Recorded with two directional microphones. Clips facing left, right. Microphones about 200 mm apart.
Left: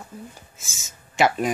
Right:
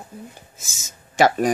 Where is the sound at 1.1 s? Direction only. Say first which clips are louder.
Right 3 dB; 40° right (ahead or behind).